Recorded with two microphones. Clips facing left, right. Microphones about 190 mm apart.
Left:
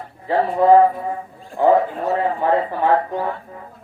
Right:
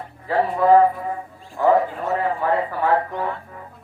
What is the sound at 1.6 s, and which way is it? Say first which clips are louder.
Speech: left 2 dB; 20° left (ahead or behind).